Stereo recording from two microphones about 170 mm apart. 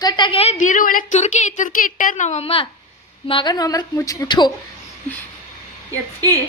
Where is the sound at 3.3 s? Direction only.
25° left (ahead or behind).